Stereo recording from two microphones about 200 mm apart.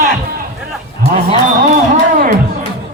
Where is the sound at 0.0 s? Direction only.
50° right (ahead or behind).